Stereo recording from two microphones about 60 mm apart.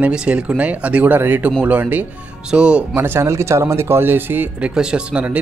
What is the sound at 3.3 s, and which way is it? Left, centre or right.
Speech, right.